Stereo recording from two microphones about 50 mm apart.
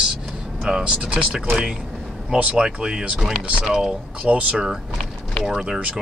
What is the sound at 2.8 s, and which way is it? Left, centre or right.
Speech, centre.